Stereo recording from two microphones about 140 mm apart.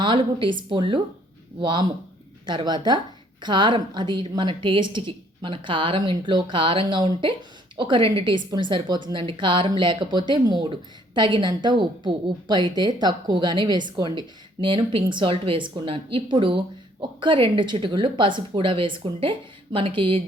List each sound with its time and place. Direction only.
0.0 s a woman's voice: 35° right (ahead or behind)